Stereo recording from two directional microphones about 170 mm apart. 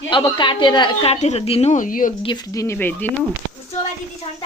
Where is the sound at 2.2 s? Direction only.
25° left (ahead or behind).